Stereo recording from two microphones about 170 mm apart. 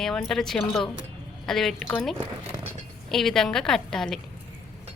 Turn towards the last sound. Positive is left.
turn(degrees=5)  # may be behind; listen again after turning